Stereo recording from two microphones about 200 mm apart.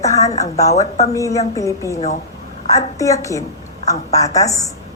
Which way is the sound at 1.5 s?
15° left (ahead or behind).